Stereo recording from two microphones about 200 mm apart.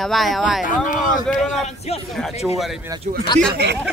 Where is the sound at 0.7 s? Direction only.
40° left (ahead or behind).